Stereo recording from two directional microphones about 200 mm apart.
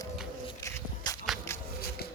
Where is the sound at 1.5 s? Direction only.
15° left (ahead or behind).